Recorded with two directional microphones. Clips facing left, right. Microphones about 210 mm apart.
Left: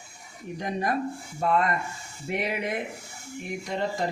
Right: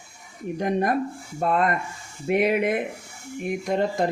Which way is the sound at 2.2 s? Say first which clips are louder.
Right 9 dB; 55° right (ahead or behind).